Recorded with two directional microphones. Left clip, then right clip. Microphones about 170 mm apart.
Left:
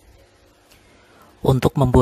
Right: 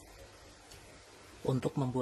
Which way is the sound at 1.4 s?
60° left (ahead or behind).